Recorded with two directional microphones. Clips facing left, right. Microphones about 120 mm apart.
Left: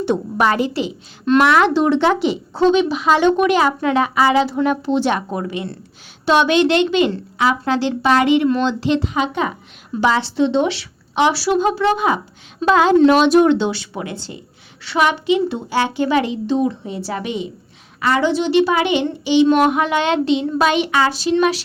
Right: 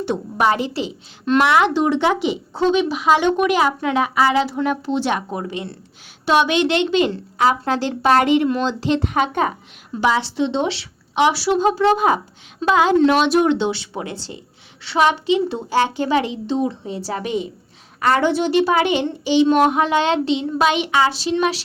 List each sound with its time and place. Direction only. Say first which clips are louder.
0.0 s a woman's voice: left 2 dB; 5° right (ahead or behind)
0.5 s a child's voice: left 3 dB; 25° right (ahead or behind)
1.4 s speech: left 2 dB; 20° right (ahead or behind)
6.2 s speech: left 2 dB; 10° right (ahead or behind)
7.3 s a woman's voice: even; 40° right (ahead or behind)
9.0 s a woman's voice: right 1 dB; 50° right (ahead or behind)
10.0 s speech: left 2 dB; 10° right (ahead or behind)
10.5 s a child's voice: left 4 dB; 30° right (ahead or behind)
11.1 s a woman's voice: left 1 dB; 15° right (ahead or behind); by 12.2 s 40° right (ahead or behind)
12.6 s speech: left 2 dB; 10° right (ahead or behind)
13.1 s a woman's voice: left 4 dB; centre (ahead or behind)
13.5 s a child's voice: left 2 dB; 20° right (ahead or behind)